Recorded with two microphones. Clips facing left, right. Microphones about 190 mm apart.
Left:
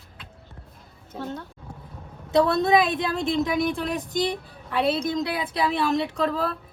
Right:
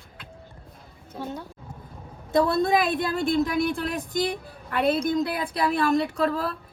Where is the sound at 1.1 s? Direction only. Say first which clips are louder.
Left 1 dB; 10° right (ahead or behind).